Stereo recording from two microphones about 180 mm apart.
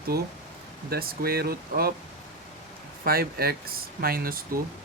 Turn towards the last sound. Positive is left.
turn(degrees=-55)  # may be behind; listen again after turning